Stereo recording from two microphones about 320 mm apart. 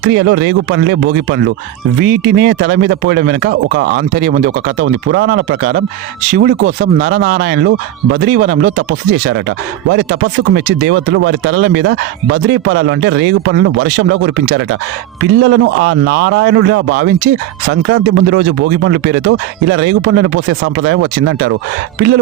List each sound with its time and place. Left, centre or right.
0.0 s a man's voice: right